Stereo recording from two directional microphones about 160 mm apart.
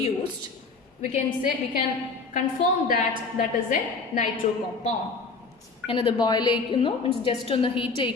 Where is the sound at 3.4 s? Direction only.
50° left (ahead or behind).